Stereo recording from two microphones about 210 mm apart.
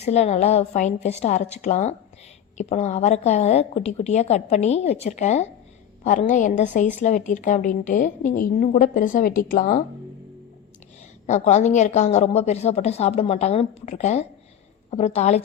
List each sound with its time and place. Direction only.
0.0 s a woman's voice: 30° left (ahead or behind)
11.3 s a woman's voice: 35° left (ahead or behind)